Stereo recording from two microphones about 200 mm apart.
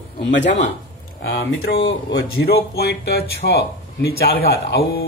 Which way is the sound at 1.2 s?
65° left (ahead or behind).